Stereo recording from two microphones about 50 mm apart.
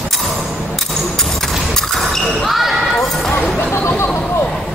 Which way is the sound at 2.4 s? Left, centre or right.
Centre.